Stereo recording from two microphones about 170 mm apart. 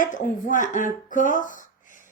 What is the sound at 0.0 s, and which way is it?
Speech, 50° left (ahead or behind).